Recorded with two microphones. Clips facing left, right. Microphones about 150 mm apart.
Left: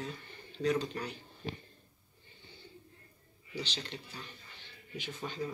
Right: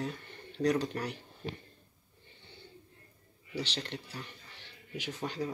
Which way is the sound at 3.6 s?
65° right (ahead or behind).